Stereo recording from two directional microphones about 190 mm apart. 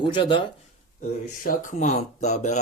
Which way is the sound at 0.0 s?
25° left (ahead or behind).